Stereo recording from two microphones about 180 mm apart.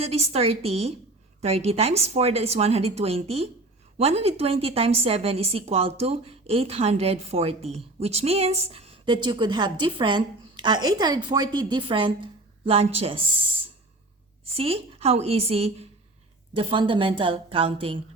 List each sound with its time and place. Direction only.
0.0 s a woman's voice: 35° right (ahead or behind)
14.5 s a woman's voice: 30° right (ahead or behind)